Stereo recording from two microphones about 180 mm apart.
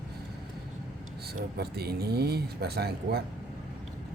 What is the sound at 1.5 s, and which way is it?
Speech, 60° right (ahead or behind).